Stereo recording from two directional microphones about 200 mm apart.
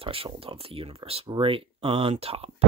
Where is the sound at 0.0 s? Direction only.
30° right (ahead or behind).